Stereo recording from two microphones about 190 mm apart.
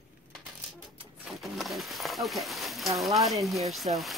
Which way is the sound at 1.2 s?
Centre (ahead or behind).